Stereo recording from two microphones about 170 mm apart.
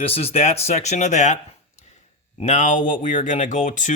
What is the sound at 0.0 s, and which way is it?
Speech, 35° left (ahead or behind).